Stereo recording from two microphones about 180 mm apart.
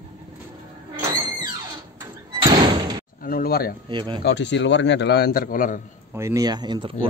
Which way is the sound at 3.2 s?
55° left (ahead or behind).